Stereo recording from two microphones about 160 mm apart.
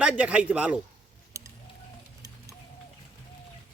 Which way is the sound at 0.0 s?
10° right (ahead or behind).